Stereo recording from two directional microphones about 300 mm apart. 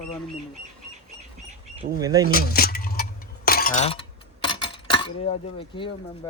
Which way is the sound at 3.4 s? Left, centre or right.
Left.